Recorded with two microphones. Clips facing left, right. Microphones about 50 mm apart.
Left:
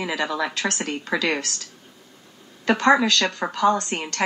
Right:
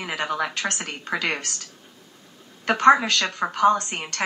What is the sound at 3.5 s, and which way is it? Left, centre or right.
Speech, right.